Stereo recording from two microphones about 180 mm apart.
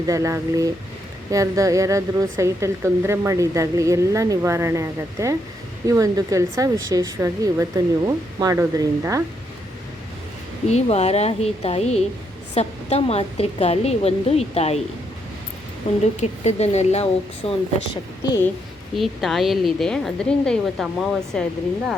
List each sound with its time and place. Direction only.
0.0 s a woman's voice: 20° right (ahead or behind)
10.7 s a woman's voice: 35° left (ahead or behind)
15.9 s a woman's voice: 35° left (ahead or behind)
18.9 s a woman's voice: centre (ahead or behind)